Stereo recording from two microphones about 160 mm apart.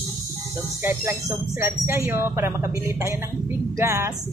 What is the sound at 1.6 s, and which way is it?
Speech, 15° right (ahead or behind).